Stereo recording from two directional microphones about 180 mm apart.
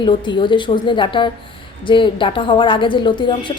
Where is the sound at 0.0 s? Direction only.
25° left (ahead or behind).